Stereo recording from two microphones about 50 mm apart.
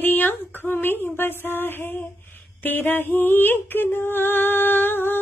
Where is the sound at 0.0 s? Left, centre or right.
Left.